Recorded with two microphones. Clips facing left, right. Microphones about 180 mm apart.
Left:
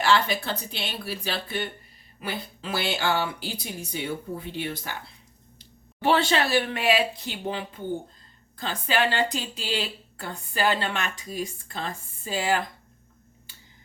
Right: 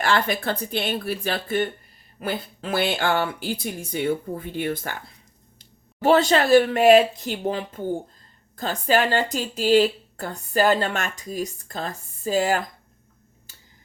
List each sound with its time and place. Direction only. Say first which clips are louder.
0.0 s a woman's voice: right 1 dB; 50° right (ahead or behind)